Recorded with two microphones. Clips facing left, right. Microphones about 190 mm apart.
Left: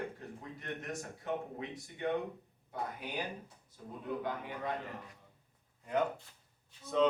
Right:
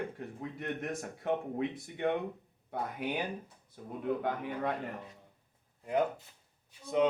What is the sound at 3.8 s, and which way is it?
Speech, 60° right (ahead or behind).